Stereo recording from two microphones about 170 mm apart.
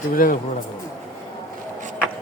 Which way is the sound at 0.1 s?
55° left (ahead or behind).